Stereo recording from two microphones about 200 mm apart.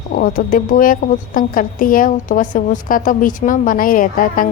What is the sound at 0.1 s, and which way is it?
A woman's voice, 45° left (ahead or behind).